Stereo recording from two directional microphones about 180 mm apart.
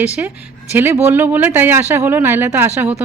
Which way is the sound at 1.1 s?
10° right (ahead or behind).